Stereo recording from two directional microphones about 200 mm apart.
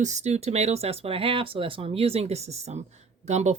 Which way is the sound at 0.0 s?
35° right (ahead or behind).